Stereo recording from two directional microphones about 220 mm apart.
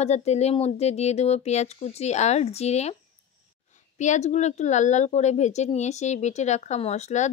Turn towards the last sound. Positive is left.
turn(degrees=30)  # may be behind; listen again after turning